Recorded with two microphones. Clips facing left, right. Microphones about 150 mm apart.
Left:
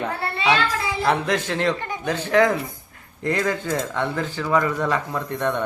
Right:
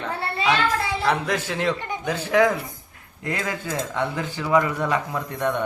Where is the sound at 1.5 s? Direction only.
10° right (ahead or behind).